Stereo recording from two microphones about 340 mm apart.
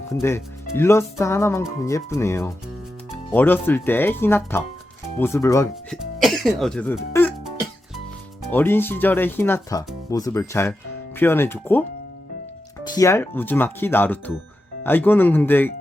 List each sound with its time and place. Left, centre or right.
0.1 s speech: centre
13.0 s speech: centre